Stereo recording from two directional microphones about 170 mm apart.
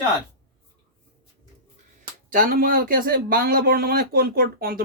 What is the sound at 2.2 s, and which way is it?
Speech, 55° right (ahead or behind).